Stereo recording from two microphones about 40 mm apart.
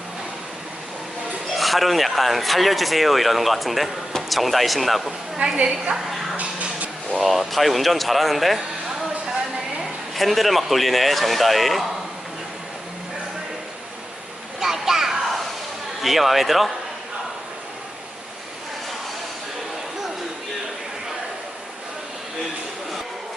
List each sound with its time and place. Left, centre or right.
1.5 s speech: centre
5.5 s a woman's voice: right
6.3 s a sound: right
7.2 s speech: centre
10.2 s speech: centre
14.6 s a sound: centre
16.0 s speech: centre